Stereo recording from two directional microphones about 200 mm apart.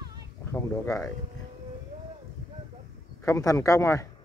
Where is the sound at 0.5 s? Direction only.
10° left (ahead or behind).